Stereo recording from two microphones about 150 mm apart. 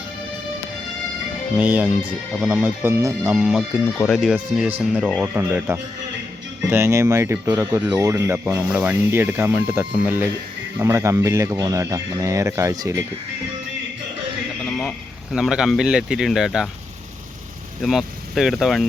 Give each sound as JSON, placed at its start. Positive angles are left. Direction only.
{"t": 1.5, "sound": "speech", "side_deg": -10}
{"t": 14.6, "sound": "speech", "side_deg": 0}
{"t": 17.8, "sound": "speech", "side_deg": 0}